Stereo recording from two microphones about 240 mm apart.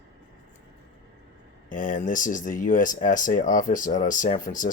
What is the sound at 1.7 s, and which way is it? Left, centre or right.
Speech, left.